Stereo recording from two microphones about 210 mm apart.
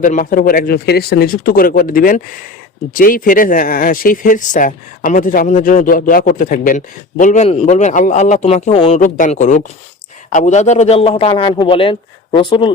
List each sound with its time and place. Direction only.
0.0 s a man's voice: 40° left (ahead or behind); by 12.7 s 20° left (ahead or behind)